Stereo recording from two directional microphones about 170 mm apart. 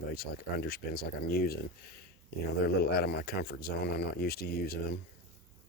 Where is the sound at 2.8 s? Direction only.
70° left (ahead or behind).